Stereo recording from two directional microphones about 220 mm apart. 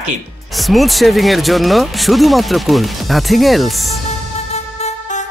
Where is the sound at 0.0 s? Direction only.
Centre (ahead or behind).